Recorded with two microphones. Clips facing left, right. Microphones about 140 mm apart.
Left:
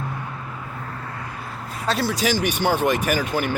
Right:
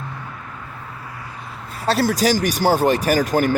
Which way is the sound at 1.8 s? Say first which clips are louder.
Right 5 dB; 35° right (ahead or behind).